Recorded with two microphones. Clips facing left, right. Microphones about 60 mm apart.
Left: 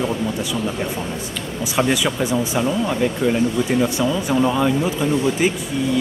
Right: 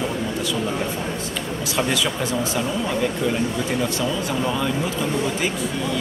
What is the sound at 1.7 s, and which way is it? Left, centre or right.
Speech, centre.